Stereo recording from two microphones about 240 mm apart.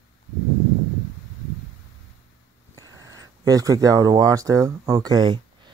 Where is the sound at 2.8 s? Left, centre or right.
Centre.